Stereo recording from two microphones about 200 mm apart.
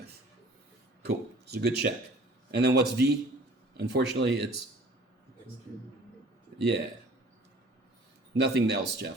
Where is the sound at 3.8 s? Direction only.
60° right (ahead or behind).